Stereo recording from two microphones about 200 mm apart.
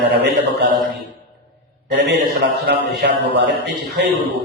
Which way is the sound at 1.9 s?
55° right (ahead or behind).